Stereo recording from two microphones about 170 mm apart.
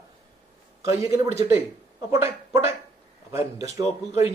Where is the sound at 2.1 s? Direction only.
15° right (ahead or behind).